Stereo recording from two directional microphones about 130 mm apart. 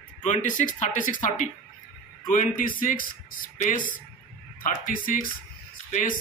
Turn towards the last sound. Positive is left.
turn(degrees=90)